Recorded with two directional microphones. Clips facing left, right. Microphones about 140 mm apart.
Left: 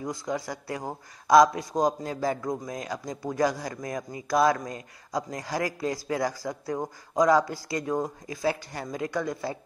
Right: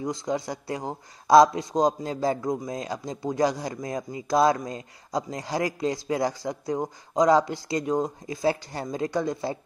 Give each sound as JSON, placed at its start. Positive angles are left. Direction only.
{"t": 0.0, "sound": "a man's voice", "side_deg": -20}